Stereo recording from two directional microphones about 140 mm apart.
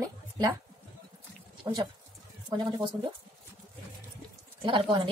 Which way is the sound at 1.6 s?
35° right (ahead or behind).